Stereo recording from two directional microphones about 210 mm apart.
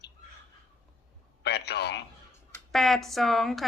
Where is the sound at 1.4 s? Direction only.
50° left (ahead or behind).